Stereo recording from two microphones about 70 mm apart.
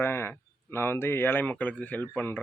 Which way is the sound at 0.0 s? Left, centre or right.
Left.